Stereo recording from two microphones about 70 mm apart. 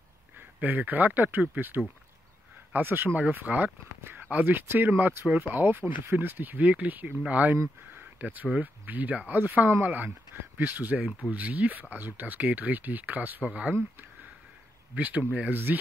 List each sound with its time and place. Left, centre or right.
0.6 s speech: right
7.9 s a sound: right
8.5 s speech: right
15.0 s speech: right